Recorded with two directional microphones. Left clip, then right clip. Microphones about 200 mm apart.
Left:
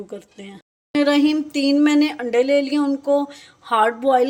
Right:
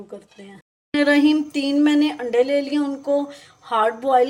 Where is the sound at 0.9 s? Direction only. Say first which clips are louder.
Right 1 dB; 15° left (ahead or behind).